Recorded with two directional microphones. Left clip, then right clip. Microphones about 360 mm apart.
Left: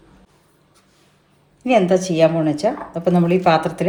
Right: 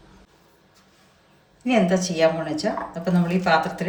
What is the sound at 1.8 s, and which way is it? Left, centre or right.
Speech, centre.